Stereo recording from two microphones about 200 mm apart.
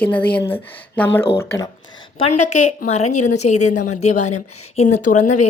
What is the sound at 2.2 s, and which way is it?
A woman's voice, 35° left (ahead or behind).